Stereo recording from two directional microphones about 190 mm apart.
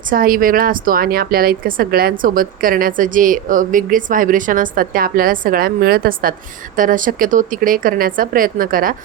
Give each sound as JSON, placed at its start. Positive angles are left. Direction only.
{"t": 0.1, "sound": "a woman's voice", "side_deg": -50}